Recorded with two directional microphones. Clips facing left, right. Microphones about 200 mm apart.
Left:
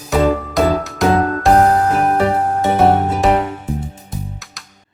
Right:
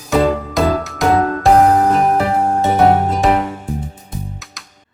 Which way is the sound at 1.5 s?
Centre (ahead or behind).